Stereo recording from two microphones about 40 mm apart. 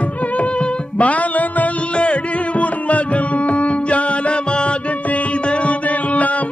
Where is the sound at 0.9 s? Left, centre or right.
Left.